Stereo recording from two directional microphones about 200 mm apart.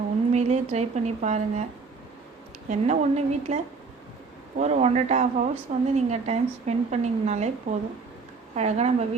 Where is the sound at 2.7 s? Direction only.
35° right (ahead or behind).